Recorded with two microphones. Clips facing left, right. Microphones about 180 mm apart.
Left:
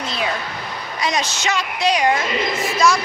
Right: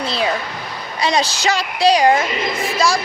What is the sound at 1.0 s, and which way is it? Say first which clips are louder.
Speech: right 4 dB; 30° right (ahead or behind).